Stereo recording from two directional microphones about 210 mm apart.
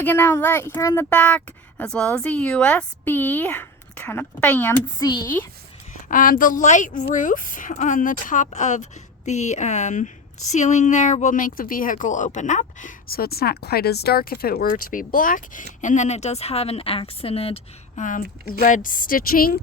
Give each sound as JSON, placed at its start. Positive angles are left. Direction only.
{"t": 0.0, "sound": "speech", "side_deg": 10}
{"t": 6.1, "sound": "a woman's voice", "side_deg": 40}